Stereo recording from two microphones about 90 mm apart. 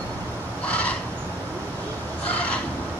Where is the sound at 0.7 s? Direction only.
15° left (ahead or behind).